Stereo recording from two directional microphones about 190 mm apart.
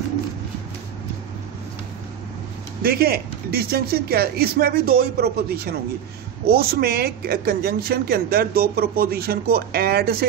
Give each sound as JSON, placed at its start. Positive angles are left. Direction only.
{"t": 2.8, "sound": "speech", "side_deg": -50}